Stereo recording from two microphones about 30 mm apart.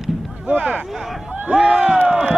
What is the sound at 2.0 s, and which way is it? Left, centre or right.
Crowd, right.